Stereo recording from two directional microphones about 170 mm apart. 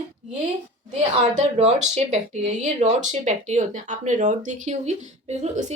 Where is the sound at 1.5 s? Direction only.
40° right (ahead or behind).